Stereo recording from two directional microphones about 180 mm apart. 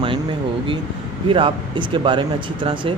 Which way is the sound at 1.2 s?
30° right (ahead or behind).